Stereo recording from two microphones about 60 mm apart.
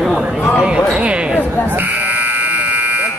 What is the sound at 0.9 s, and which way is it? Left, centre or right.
Speech, centre.